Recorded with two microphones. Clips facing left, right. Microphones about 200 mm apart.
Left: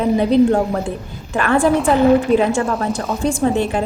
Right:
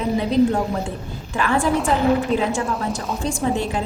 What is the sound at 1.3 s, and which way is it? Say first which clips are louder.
A woman's voice: left 5 dB; 55° left (ahead or behind).